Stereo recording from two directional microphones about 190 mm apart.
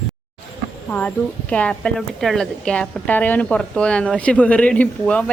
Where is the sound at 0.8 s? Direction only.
10° left (ahead or behind).